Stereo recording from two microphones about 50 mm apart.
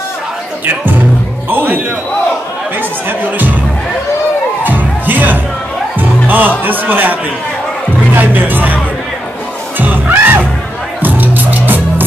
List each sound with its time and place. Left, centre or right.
0.7 s music: right
1.5 s a man's voice: right
3.1 s speech: right
4.6 s music: right
6.6 s speech: right
8.2 s speech: right
9.8 s music: right